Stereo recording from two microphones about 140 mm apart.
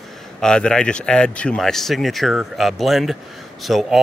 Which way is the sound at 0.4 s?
5° left (ahead or behind).